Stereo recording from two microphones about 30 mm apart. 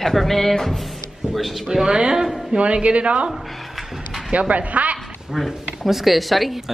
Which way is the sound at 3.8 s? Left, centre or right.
Centre.